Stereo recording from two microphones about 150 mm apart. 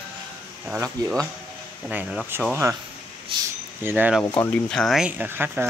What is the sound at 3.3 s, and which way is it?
Speech, 35° right (ahead or behind).